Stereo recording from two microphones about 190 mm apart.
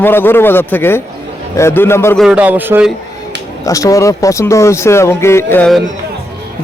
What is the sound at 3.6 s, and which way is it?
Speech, 15° left (ahead or behind).